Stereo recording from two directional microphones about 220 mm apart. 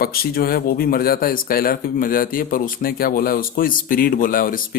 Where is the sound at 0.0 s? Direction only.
45° left (ahead or behind).